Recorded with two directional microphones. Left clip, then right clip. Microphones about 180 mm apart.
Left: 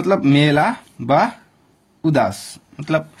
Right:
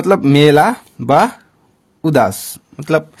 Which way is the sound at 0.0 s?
30° right (ahead or behind).